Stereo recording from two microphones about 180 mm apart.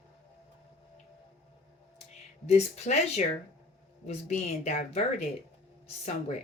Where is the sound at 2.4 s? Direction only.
35° left (ahead or behind).